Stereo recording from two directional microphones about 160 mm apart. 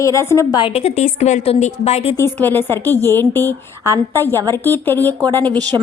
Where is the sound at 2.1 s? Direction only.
15° left (ahead or behind).